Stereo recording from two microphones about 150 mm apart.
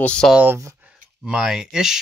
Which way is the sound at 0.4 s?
15° right (ahead or behind).